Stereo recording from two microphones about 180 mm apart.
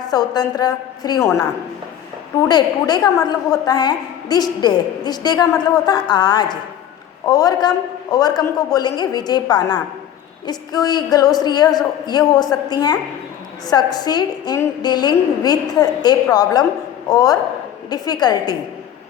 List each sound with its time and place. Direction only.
0.1 s a woman's voice: 20° left (ahead or behind)
2.5 s a woman's voice: 25° left (ahead or behind)